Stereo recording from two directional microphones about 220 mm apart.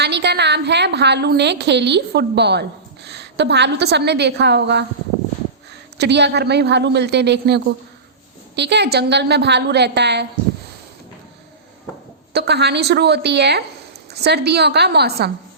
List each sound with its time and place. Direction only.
0.0 s a woman's voice: 50° right (ahead or behind)
6.0 s a woman's voice: 50° right (ahead or behind)
12.3 s a woman's voice: 50° right (ahead or behind)